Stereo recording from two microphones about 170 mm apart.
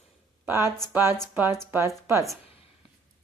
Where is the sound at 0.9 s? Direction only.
15° right (ahead or behind).